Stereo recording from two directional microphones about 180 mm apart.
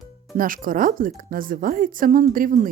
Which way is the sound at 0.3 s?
50° right (ahead or behind).